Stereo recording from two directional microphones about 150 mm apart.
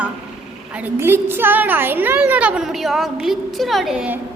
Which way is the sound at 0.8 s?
15° right (ahead or behind).